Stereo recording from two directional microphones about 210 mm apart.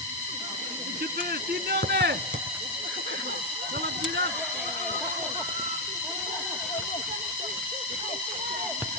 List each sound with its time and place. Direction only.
1.7 s speech: 50° right (ahead or behind)